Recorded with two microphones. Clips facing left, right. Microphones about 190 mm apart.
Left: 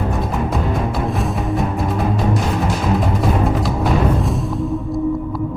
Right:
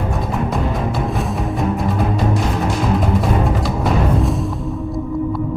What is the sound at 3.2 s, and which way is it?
Timpani, centre (ahead or behind).